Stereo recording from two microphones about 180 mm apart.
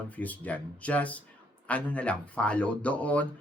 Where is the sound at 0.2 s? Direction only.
10° left (ahead or behind).